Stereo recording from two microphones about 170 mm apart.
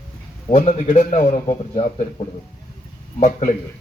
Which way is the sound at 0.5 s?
50° left (ahead or behind).